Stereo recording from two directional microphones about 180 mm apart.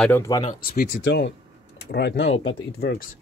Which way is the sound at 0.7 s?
65° left (ahead or behind).